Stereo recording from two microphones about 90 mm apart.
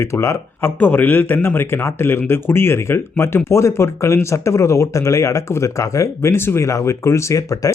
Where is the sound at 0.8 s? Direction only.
20° left (ahead or behind).